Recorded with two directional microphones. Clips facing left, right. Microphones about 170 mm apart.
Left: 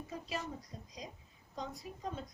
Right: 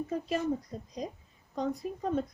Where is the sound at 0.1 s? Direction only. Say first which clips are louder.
Right 10 dB; 55° right (ahead or behind).